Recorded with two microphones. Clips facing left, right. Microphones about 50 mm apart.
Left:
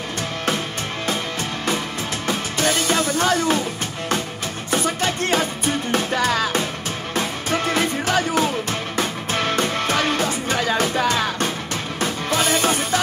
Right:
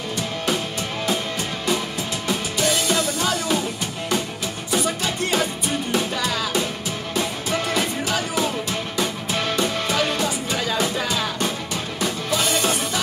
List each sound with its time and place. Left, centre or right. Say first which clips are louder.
2.2 s music: left 1 dB; left
4.6 s music: left 2 dB; left